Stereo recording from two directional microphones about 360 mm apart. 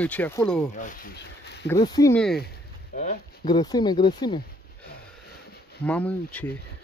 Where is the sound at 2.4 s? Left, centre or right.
Left.